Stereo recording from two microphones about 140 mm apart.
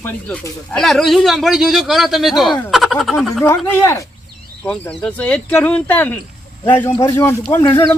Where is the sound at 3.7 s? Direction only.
20° left (ahead or behind).